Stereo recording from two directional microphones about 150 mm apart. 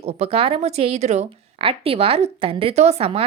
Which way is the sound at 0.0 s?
45° right (ahead or behind).